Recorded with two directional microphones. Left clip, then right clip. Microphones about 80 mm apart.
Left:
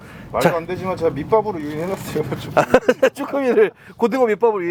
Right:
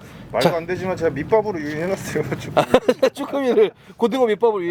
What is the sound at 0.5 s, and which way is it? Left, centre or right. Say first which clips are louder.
Speech: even; right.